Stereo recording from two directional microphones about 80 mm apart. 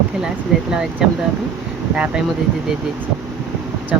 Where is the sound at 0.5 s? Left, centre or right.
Centre.